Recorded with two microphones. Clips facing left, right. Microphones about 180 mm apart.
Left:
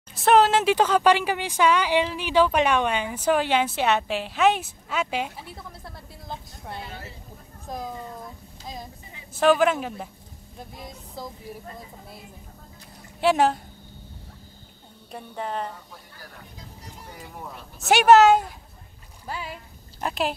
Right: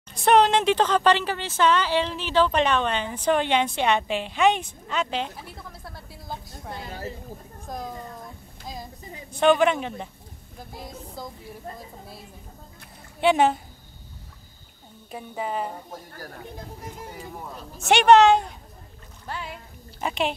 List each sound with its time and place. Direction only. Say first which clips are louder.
0.1 s speech: even; centre (ahead or behind)
6.9 s a woman's voice: right 6 dB; 40° right (ahead or behind)
7.6 s speech: left 1 dB; centre (ahead or behind)
9.3 s speech: even; centre (ahead or behind)
13.2 s speech: right 1 dB; centre (ahead or behind)
15.0 s speech: right 1 dB; 5° right (ahead or behind)
15.7 s speech: right 6 dB; 45° right (ahead or behind)
17.7 s speech: even; centre (ahead or behind)